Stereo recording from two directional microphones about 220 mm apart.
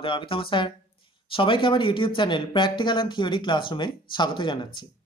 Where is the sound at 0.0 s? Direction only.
25° left (ahead or behind).